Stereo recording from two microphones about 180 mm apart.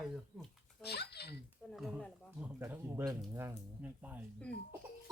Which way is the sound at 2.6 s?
10° right (ahead or behind).